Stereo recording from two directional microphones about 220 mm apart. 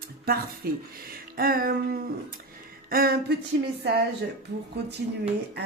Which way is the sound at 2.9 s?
45° right (ahead or behind).